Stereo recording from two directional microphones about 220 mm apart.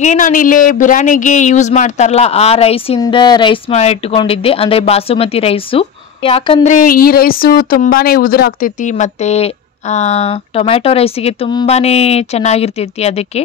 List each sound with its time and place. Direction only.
0.0 s speech: 35° left (ahead or behind)